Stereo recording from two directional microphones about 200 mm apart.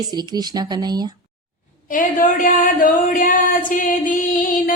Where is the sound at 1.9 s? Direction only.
40° left (ahead or behind).